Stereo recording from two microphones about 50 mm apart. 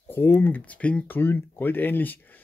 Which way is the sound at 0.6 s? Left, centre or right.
Left.